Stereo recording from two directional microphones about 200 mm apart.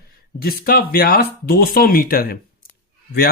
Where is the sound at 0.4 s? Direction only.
50° left (ahead or behind).